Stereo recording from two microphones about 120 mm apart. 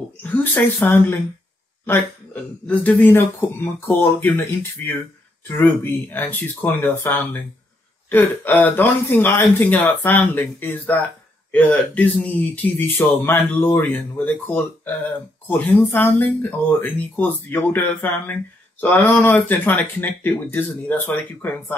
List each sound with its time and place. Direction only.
0.2 s speech: 15° left (ahead or behind)
2.6 s speech: 15° left (ahead or behind)